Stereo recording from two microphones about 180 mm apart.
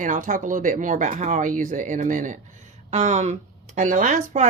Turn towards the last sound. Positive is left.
turn(degrees=-45)  # may be behind; listen again after turning